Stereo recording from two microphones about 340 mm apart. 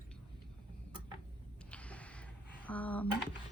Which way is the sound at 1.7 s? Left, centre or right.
Centre.